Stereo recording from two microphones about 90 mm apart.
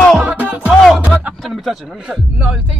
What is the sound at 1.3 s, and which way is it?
A man's voice, centre (ahead or behind).